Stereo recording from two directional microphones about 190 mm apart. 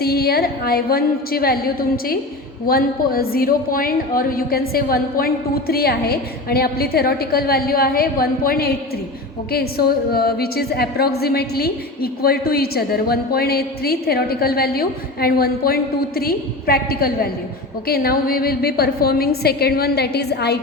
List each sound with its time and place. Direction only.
0.0 s a woman's voice: 55° left (ahead or behind)